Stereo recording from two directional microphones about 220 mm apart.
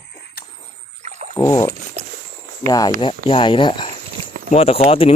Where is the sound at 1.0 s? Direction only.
30° right (ahead or behind).